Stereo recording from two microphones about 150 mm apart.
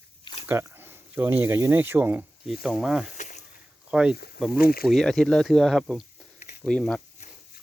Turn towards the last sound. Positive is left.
turn(degrees=5)  # may be behind; listen again after turning